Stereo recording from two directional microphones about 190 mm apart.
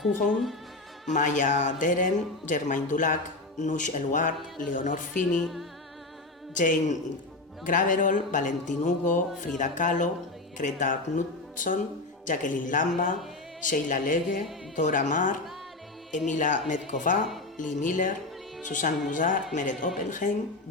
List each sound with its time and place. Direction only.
1.1 s speech: 40° left (ahead or behind)
5.3 s music: centre (ahead or behind)
6.5 s speech: 40° left (ahead or behind)